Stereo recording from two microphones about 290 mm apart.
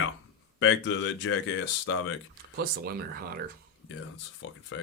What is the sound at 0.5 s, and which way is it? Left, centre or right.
Speech, left.